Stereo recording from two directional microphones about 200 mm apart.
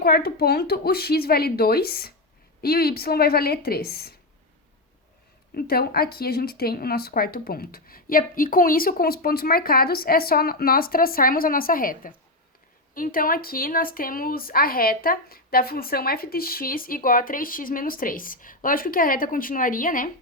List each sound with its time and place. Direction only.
0.0 s speech: 50° left (ahead or behind)
5.5 s speech: 50° left (ahead or behind)